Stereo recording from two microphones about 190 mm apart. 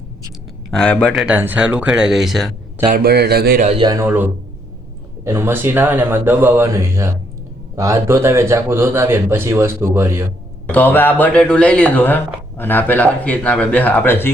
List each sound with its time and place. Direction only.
0.7 s speech: 5° left (ahead or behind)
2.8 s a man's voice: 50° right (ahead or behind)
3.7 s a man's voice: 25° right (ahead or behind)
3.9 s a man's voice: 10° right (ahead or behind)
10.7 s speech: 10° left (ahead or behind)